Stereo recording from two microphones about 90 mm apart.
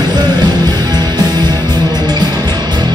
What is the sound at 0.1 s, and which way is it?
Music, 50° right (ahead or behind).